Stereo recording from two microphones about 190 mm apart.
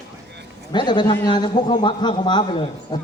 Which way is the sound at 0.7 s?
25° left (ahead or behind).